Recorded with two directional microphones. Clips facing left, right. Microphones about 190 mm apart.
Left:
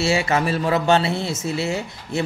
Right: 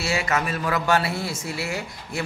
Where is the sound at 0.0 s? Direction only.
25° left (ahead or behind).